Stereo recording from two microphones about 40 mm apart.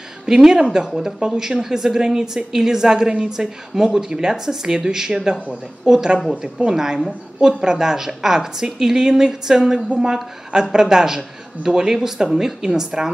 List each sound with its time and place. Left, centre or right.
0.3 s speech: centre